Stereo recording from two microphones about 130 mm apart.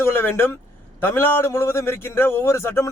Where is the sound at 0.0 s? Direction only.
15° left (ahead or behind).